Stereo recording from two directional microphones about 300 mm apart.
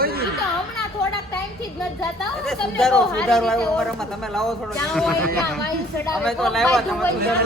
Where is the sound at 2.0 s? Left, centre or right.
Centre.